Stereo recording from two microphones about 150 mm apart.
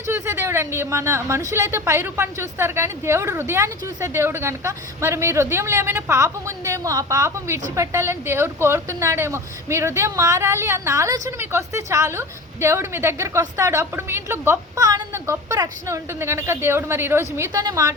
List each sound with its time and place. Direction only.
0.1 s a woman's voice: 20° right (ahead or behind)